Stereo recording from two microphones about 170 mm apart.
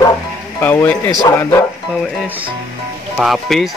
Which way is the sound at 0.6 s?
10° left (ahead or behind).